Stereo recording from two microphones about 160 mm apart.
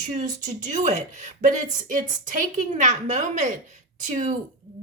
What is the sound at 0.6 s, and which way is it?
A woman's voice, 50° right (ahead or behind).